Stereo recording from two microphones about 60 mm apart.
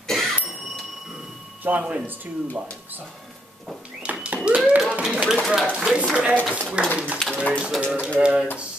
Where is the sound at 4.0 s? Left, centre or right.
Right.